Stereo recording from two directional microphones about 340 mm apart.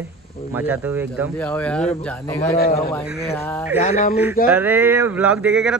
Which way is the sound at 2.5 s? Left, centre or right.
Left.